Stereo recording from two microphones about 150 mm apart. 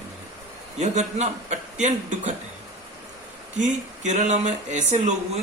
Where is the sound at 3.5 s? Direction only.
55° right (ahead or behind).